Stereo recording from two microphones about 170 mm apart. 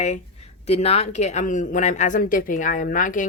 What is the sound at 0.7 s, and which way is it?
A woman's voice, 35° left (ahead or behind).